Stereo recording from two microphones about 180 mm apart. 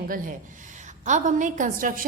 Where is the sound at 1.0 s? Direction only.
40° right (ahead or behind).